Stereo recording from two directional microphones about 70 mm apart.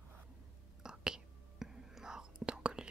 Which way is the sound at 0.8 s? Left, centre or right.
Centre.